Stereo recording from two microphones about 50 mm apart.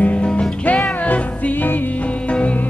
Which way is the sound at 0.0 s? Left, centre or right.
Left.